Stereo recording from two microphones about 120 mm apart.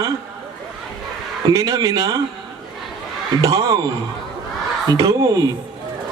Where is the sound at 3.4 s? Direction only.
30° right (ahead or behind).